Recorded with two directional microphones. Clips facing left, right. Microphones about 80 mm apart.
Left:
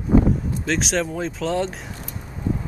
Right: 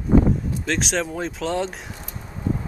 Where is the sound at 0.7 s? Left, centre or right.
Centre.